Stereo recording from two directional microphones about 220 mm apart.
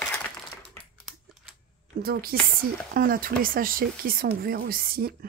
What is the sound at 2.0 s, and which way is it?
A woman's voice, 40° right (ahead or behind).